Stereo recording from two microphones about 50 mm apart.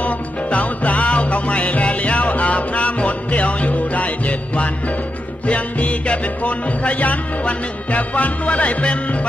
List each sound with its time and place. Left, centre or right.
0.0 s music: left